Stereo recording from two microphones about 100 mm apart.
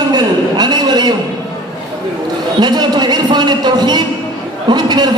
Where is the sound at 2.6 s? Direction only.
45° right (ahead or behind).